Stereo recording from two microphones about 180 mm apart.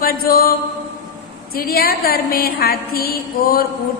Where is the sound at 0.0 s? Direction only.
55° left (ahead or behind).